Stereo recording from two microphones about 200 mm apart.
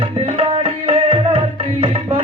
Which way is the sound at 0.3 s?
25° right (ahead or behind).